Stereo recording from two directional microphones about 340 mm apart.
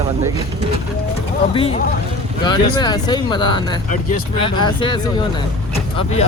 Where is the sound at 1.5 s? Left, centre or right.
Centre.